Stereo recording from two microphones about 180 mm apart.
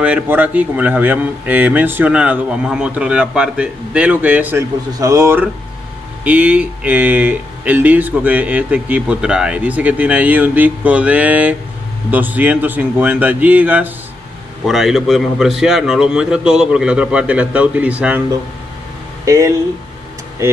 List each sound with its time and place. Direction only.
0.0 s a man's voice: 10° right (ahead or behind)
19.2 s speech: 15° right (ahead or behind)